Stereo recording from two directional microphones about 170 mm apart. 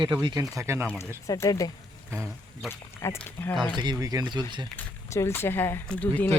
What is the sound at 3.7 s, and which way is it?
Speech, 25° right (ahead or behind).